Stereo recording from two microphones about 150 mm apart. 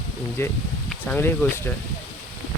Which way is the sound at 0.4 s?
15° left (ahead or behind).